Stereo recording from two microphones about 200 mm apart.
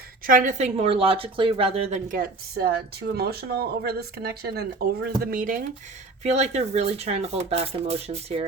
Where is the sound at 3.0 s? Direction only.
55° right (ahead or behind); by 8.4 s 30° right (ahead or behind).